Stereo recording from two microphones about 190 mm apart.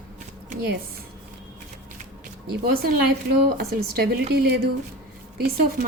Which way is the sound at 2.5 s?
55° right (ahead or behind).